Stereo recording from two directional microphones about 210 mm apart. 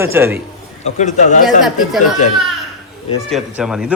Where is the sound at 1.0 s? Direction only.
35° left (ahead or behind).